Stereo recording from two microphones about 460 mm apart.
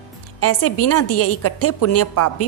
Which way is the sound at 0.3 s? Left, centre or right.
Left.